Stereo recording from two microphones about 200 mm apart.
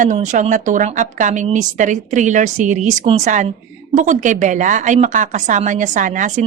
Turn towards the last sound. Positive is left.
turn(degrees=-40)  # may be behind; listen again after turning